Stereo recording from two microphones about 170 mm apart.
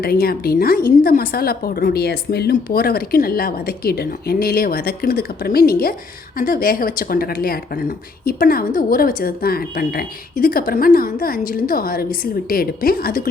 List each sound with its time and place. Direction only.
0.0 s speech: 65° left (ahead or behind)